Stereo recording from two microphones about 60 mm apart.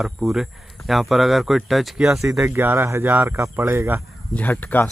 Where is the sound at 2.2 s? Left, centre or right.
Right.